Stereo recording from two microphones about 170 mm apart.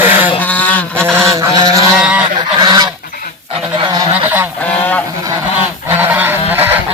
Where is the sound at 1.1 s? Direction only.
20° right (ahead or behind).